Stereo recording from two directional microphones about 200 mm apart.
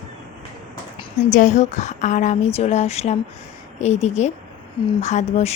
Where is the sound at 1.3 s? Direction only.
35° left (ahead or behind).